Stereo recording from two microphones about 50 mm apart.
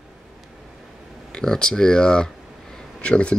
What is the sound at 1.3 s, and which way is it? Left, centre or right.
Speech, centre.